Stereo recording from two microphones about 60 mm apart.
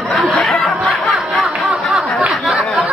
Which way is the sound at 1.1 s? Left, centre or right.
Centre.